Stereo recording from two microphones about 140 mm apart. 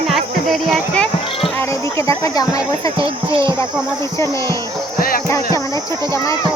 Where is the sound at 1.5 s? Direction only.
20° left (ahead or behind).